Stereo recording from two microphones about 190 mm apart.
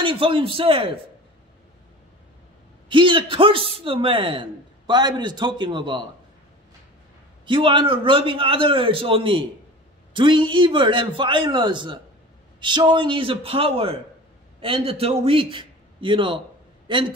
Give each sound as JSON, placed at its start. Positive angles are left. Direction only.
{"t": 0.0, "sound": "a man's voice", "side_deg": -30}
{"t": 2.9, "sound": "a man's voice", "side_deg": -25}
{"t": 7.4, "sound": "a man's voice", "side_deg": -25}